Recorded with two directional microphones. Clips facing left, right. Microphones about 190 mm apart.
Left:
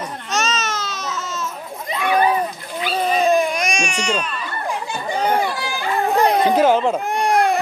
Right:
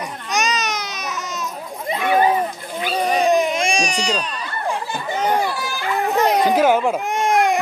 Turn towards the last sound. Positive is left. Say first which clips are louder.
# even
turn(degrees=-20)  # may be behind; listen again after turning